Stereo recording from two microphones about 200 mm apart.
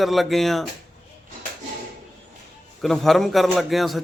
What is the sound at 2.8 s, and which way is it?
Speech, centre (ahead or behind).